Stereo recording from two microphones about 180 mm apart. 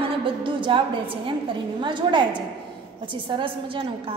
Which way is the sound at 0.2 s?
30° right (ahead or behind).